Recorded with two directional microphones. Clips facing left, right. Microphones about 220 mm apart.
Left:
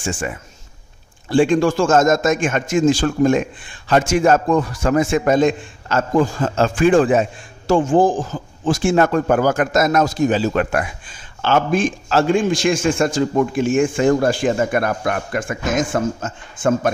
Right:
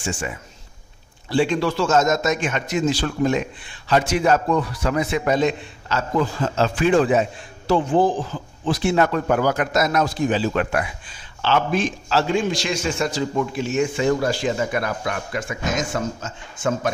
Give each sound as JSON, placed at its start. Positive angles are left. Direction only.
{"t": 0.0, "sound": "a man's voice", "side_deg": 50}